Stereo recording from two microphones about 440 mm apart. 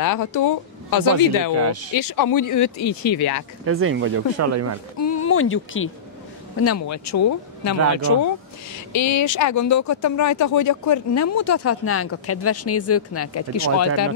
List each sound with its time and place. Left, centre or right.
0.0 s speech: left
1.5 s speech: right
2.0 s speech: left
3.6 s speech: right
5.0 s speech: left
8.7 s speech: left